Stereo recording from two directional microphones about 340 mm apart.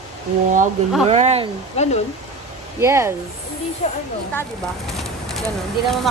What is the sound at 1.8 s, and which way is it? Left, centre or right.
Speech, centre.